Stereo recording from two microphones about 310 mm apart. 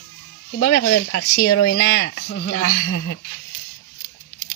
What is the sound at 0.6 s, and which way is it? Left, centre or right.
Speech, left.